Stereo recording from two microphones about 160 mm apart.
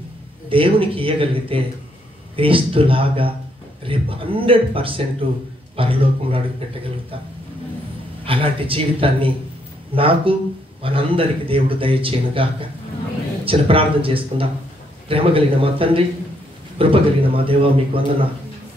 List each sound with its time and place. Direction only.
0.5 s speech: 35° right (ahead or behind)
8.3 s speech: 35° right (ahead or behind)